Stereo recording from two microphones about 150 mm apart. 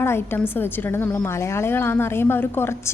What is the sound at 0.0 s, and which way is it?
A woman's voice, 15° left (ahead or behind).